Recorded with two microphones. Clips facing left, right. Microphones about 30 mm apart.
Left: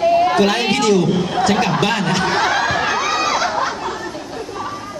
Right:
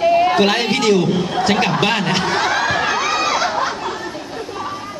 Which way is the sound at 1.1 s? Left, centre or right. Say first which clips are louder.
Even; centre.